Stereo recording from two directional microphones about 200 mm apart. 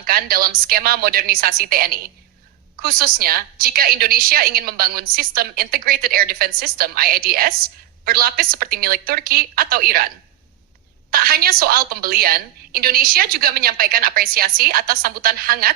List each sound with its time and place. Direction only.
0.0 s a woman's voice: 50° right (ahead or behind)
11.1 s a woman's voice: 50° right (ahead or behind)